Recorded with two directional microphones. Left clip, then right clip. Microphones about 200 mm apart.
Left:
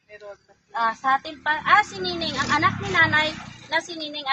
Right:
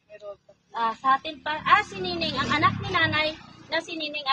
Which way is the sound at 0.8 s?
20° right (ahead or behind).